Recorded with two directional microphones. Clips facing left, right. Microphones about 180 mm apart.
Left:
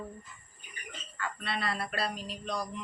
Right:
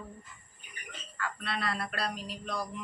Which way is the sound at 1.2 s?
Centre (ahead or behind).